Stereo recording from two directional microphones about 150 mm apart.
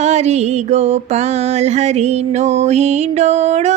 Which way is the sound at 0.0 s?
50° right (ahead or behind).